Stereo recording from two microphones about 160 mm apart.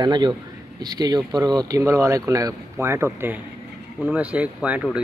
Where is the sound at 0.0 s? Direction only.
25° right (ahead or behind).